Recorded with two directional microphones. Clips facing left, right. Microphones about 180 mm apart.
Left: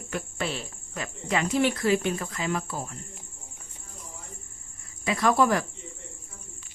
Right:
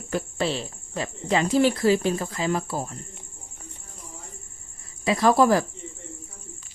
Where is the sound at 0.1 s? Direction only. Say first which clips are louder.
Right 6 dB; 30° right (ahead or behind).